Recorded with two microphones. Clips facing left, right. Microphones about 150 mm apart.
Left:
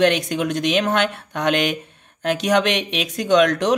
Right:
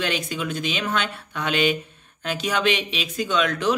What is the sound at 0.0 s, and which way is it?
Speech, 65° left (ahead or behind).